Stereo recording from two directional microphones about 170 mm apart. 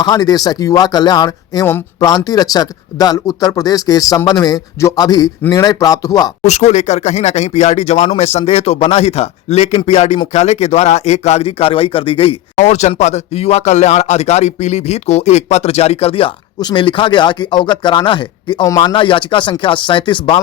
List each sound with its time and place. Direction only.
0.0 s speech: 20° left (ahead or behind)
6.4 s speech: 40° left (ahead or behind)
12.5 s speech: 45° left (ahead or behind)